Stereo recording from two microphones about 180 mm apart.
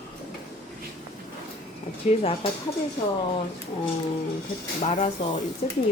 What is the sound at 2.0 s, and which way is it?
Speech, 35° left (ahead or behind).